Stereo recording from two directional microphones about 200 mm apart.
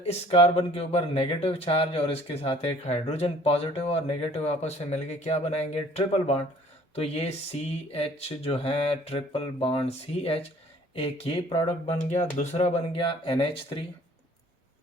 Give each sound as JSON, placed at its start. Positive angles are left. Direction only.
{"t": 0.0, "sound": "speech", "side_deg": 30}